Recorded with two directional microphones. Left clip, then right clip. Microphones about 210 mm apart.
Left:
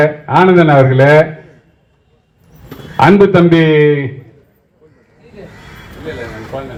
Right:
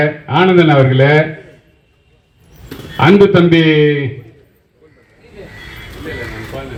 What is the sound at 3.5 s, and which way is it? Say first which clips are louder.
Speech: left 1 dB; 35° left (ahead or behind).